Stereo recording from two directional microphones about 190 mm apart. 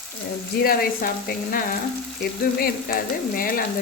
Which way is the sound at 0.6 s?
50° left (ahead or behind).